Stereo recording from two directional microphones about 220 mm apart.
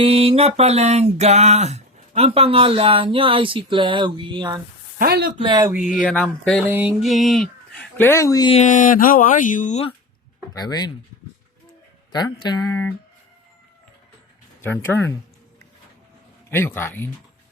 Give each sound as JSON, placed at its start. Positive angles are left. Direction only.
{"t": 0.0, "sound": "a sound", "side_deg": -25}
{"t": 4.9, "sound": "speech", "side_deg": -45}
{"t": 5.4, "sound": "a sound", "side_deg": -20}
{"t": 6.0, "sound": "speech", "side_deg": 5}
{"t": 6.7, "sound": "speech", "side_deg": -5}
{"t": 8.5, "sound": "speech", "side_deg": 35}
{"t": 10.5, "sound": "speech", "side_deg": 15}
{"t": 12.1, "sound": "speech", "side_deg": 20}
{"t": 14.6, "sound": "speech", "side_deg": 10}
{"t": 16.5, "sound": "speech", "side_deg": 10}